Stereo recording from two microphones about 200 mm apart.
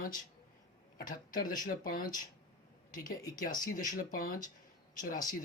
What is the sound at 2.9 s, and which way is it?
Speech, 20° left (ahead or behind).